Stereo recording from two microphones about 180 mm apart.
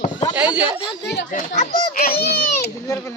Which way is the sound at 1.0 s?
70° left (ahead or behind).